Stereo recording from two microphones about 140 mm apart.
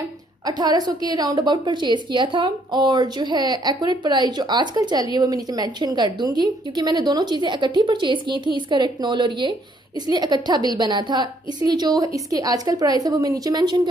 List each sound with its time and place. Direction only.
0.5 s a woman's voice: 30° right (ahead or behind)